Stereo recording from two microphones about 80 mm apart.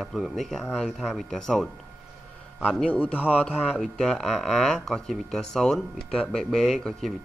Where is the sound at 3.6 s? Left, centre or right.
Centre.